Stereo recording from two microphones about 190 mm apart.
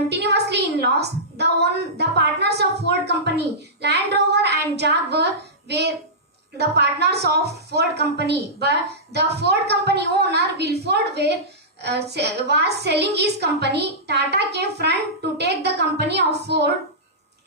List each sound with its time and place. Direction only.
0.1 s a sound: 60° right (ahead or behind)
3.1 s child singing: 60° right (ahead or behind)
5.6 s hands: 60° right (ahead or behind)
6.6 s a woman's voice: 60° right (ahead or behind)